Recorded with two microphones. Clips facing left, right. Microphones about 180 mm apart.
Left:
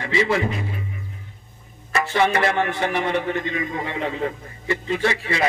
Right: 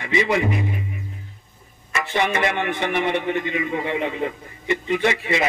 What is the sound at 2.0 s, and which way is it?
A man's voice, 20° right (ahead or behind).